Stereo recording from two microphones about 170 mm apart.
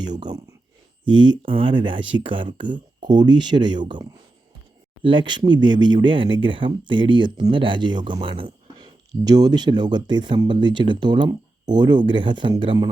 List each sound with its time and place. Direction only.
0.0 s speech: 25° right (ahead or behind)
5.0 s speech: 30° right (ahead or behind)